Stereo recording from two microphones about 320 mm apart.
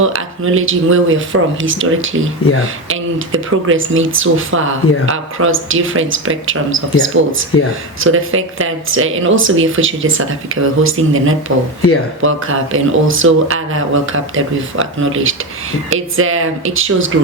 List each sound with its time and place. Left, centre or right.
0.0 s speech: right